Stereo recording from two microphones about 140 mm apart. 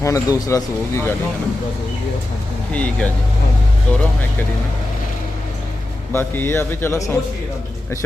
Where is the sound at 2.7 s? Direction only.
10° left (ahead or behind).